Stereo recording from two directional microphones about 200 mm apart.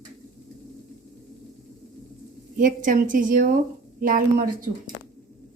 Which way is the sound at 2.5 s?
40° right (ahead or behind).